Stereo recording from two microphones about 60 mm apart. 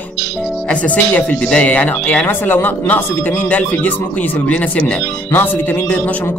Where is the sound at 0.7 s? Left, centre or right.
Left.